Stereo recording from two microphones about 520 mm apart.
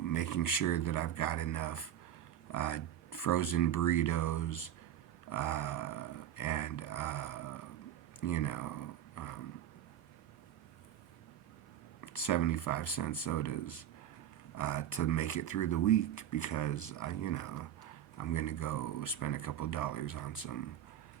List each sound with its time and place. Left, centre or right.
0.0 s speech: left
11.9 s speech: left